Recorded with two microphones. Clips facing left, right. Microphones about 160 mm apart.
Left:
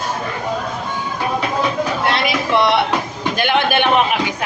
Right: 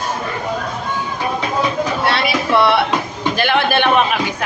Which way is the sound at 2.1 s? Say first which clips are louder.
Right 2 dB; 20° left (ahead or behind).